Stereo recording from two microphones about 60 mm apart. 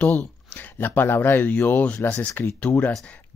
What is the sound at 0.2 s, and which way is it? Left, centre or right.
Speech, left.